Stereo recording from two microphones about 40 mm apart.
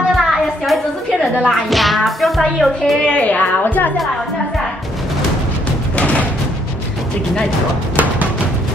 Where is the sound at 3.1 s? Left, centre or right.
Left.